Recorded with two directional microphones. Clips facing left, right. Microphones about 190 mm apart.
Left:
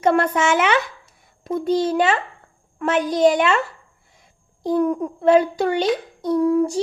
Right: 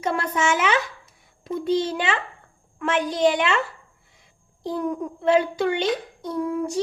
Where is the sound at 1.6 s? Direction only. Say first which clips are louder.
Left 5 dB; 45° left (ahead or behind).